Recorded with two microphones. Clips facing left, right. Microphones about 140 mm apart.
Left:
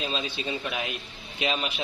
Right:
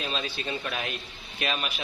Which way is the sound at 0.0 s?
15° left (ahead or behind).